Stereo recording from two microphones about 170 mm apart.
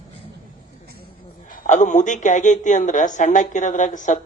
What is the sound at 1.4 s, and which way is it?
Speech, 50° left (ahead or behind).